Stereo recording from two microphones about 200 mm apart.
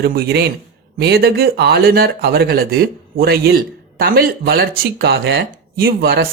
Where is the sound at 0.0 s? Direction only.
50° right (ahead or behind).